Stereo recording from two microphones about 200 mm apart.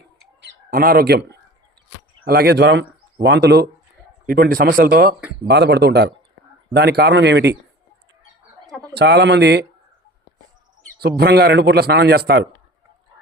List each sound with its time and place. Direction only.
0.4 s speech: 45° right (ahead or behind)
4.3 s a man's voice: 45° right (ahead or behind)
9.0 s speech: 55° right (ahead or behind)
11.2 s a man's voice: 55° right (ahead or behind)